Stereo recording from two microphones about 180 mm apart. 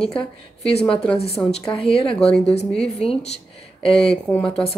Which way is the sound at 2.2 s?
5° left (ahead or behind).